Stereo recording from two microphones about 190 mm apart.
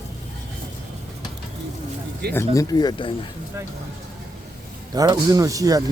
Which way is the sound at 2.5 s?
20° left (ahead or behind).